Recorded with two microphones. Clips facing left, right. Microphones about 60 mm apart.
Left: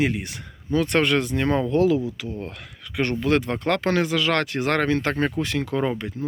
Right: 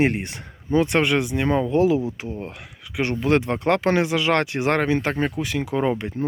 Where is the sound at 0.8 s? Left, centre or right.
Centre.